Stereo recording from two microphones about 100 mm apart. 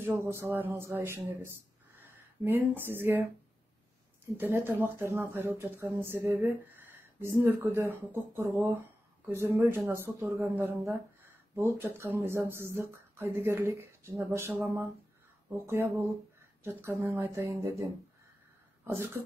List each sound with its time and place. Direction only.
0.0 s speech: 25° right (ahead or behind)
4.4 s speech: 20° right (ahead or behind)
15.6 s speech: 25° right (ahead or behind)
17.0 s speech: 20° right (ahead or behind)
17.4 s speech: 30° right (ahead or behind)